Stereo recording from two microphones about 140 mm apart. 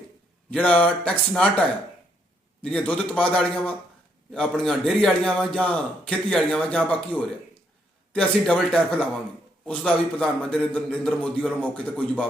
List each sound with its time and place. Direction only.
0.5 s a man's voice: 10° left (ahead or behind)